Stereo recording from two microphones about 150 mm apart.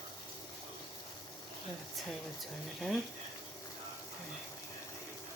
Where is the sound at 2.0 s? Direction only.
Centre (ahead or behind).